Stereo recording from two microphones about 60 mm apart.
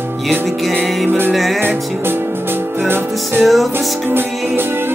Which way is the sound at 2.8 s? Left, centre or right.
Right.